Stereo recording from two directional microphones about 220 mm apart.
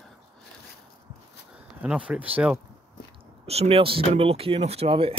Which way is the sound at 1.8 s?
5° right (ahead or behind).